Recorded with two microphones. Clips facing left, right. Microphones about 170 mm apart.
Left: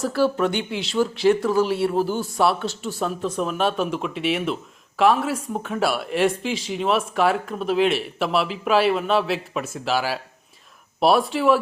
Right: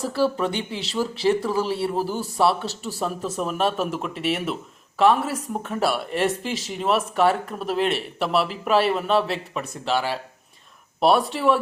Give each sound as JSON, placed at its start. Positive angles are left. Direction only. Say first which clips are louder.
{"t": 0.1, "sound": "speech", "louder": "left 1 dB", "side_deg": 0}
{"t": 0.5, "sound": "speech", "louder": "left 3 dB", "side_deg": -35}
{"t": 1.4, "sound": "speech", "louder": "left 4 dB", "side_deg": 0}